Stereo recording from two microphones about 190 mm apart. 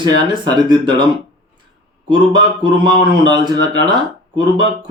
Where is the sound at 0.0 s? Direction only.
25° right (ahead or behind).